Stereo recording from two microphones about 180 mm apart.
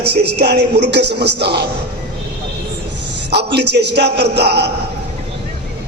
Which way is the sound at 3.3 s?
65° right (ahead or behind).